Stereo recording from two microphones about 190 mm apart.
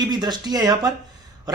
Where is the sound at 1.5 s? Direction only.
20° right (ahead or behind).